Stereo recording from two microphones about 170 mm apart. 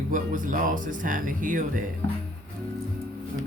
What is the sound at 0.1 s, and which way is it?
Speech, 50° right (ahead or behind).